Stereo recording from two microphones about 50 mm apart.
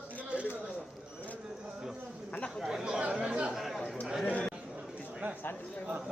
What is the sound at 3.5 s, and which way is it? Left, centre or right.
Chatter, centre.